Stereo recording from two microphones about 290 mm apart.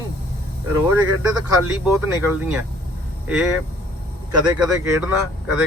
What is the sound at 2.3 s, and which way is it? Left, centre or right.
Speech, centre.